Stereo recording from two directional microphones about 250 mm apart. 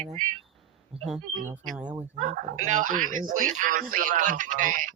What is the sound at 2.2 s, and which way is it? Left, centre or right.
Speech, right.